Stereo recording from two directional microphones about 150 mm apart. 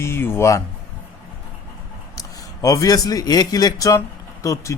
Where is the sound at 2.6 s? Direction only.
25° left (ahead or behind).